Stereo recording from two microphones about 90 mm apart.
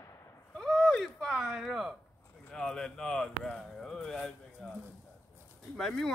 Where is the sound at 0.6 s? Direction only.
Centre (ahead or behind).